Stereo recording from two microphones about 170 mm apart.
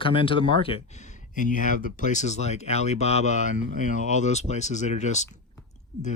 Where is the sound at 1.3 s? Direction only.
50° left (ahead or behind).